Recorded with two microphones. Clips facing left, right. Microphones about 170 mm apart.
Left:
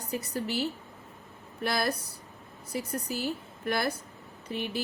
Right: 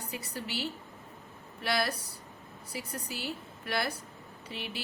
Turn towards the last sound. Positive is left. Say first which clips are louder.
# left 7 dB
turn(degrees=45)  # may be behind; listen again after turning